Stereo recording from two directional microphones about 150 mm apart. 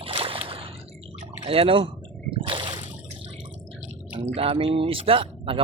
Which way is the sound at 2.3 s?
35° right (ahead or behind).